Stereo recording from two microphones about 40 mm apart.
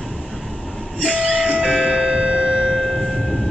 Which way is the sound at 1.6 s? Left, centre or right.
Centre.